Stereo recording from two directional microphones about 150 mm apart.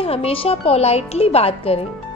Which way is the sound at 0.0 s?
40° left (ahead or behind).